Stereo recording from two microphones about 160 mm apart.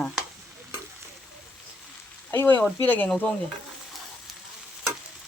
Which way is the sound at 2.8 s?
10° left (ahead or behind).